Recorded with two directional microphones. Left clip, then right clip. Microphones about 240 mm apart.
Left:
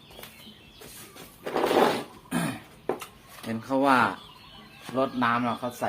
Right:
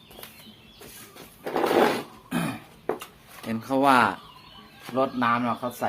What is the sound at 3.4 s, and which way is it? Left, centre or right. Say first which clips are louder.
Speech: right 2 dB; right.